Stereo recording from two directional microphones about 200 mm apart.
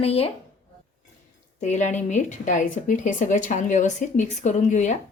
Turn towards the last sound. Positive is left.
turn(degrees=35)  # may be behind; listen again after turning